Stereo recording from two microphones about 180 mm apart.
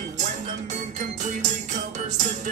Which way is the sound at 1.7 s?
45° right (ahead or behind).